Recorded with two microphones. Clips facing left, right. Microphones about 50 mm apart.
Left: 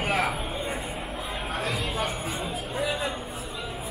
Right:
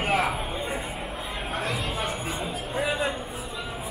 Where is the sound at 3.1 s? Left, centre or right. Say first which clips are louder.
Right 1 dB; centre.